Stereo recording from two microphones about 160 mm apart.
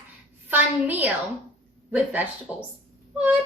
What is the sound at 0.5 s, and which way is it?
A woman's voice, 10° right (ahead or behind).